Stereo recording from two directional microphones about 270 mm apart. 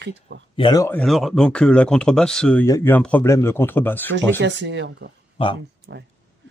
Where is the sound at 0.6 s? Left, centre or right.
Centre.